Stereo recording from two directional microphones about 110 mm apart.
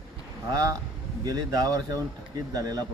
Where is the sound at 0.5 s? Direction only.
35° right (ahead or behind).